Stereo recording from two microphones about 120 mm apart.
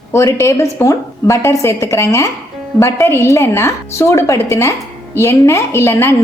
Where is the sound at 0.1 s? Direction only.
25° left (ahead or behind).